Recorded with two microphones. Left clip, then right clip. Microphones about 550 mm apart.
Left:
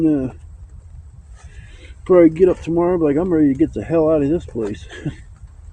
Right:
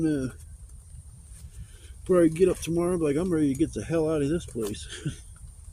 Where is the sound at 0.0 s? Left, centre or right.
Right.